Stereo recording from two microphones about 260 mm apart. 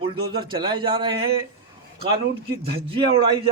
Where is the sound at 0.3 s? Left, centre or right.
Centre.